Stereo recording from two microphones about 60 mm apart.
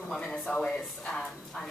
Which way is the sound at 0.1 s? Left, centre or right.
Centre.